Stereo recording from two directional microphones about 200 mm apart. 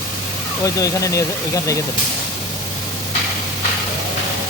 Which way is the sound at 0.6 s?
15° left (ahead or behind).